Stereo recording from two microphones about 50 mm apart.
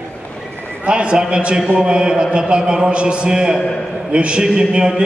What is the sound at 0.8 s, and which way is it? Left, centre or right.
A man's voice, right.